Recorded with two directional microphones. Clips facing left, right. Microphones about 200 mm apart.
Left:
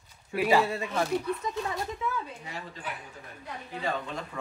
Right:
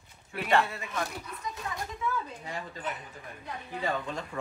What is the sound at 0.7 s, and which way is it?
Speech, 30° left (ahead or behind).